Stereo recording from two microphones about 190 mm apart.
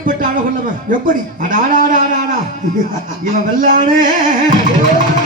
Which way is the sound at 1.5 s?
45° right (ahead or behind).